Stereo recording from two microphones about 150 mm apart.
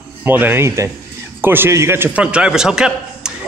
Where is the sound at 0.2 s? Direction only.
15° right (ahead or behind).